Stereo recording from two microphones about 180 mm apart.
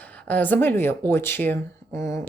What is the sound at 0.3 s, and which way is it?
Speech, 10° left (ahead or behind).